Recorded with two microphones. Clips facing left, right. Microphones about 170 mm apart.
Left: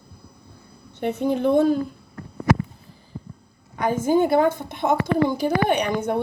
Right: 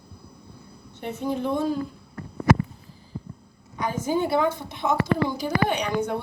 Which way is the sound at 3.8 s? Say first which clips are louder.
Left 6 dB; 50° left (ahead or behind).